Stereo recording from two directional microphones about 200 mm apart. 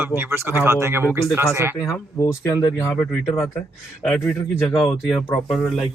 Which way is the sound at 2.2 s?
15° left (ahead or behind).